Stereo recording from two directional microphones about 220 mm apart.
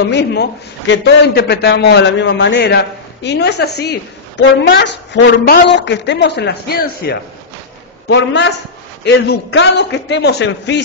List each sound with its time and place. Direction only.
0.1 s a man's voice: 50° left (ahead or behind)